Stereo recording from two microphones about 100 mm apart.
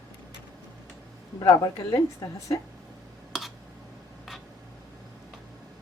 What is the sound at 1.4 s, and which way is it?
A woman's voice, 40° left (ahead or behind).